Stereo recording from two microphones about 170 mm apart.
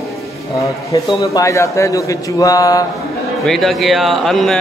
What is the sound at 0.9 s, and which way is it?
A man's voice, 20° left (ahead or behind).